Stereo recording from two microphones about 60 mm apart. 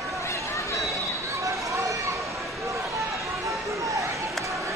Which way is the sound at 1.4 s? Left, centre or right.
Right.